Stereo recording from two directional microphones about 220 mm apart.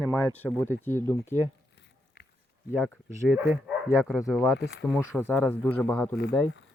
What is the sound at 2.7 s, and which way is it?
Speech, centre (ahead or behind).